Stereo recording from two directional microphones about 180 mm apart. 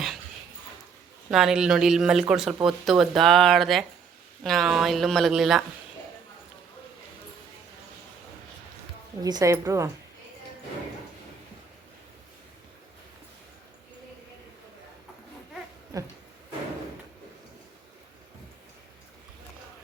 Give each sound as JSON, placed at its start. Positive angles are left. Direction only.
{"t": 1.3, "sound": "speech", "side_deg": 0}
{"t": 9.2, "sound": "a woman's voice", "side_deg": -20}
{"t": 15.9, "sound": "a sound", "side_deg": -20}